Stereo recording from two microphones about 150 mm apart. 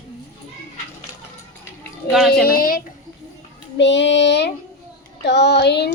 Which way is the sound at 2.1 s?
Centre (ahead or behind).